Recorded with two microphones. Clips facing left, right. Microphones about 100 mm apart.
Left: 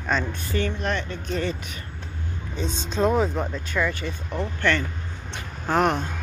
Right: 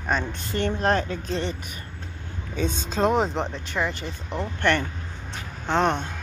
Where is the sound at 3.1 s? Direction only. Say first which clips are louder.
Even; 25° right (ahead or behind).